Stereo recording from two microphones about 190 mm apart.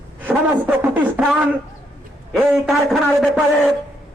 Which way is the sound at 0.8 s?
10° right (ahead or behind).